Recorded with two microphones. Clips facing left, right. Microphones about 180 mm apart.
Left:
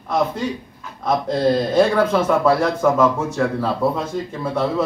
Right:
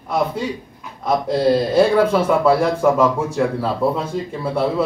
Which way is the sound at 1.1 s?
10° right (ahead or behind).